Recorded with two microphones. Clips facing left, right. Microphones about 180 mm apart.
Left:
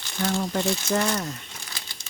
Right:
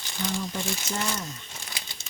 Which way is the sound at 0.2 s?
70° left (ahead or behind).